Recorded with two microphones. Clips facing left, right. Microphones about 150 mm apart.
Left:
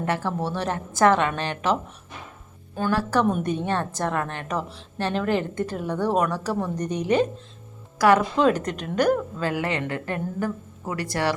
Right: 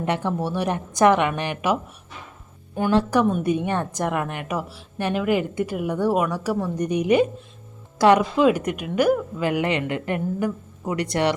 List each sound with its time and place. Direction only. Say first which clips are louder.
0.0 s a woman's voice: right 2 dB; 20° right (ahead or behind)
7.9 s speech: right 2 dB; 20° right (ahead or behind)
8.4 s a woman's voice: right 2 dB; 10° right (ahead or behind)
9.5 s a woman's voice: right 4 dB; 20° right (ahead or behind)